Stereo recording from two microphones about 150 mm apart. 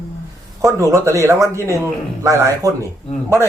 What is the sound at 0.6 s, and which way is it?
A man's voice, 20° right (ahead or behind).